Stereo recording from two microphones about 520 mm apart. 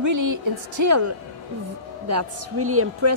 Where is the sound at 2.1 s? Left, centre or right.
Right.